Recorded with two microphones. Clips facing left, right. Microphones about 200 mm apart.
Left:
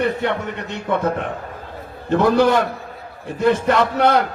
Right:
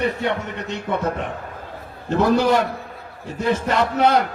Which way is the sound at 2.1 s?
55° left (ahead or behind).